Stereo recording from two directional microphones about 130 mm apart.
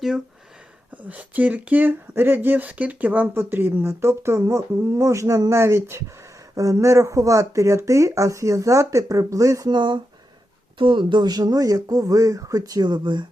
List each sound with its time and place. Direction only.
1.0 s speech: 10° right (ahead or behind); by 13.2 s 35° right (ahead or behind)